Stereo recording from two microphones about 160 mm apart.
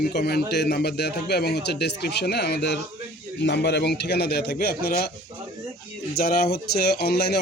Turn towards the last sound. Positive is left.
turn(degrees=90)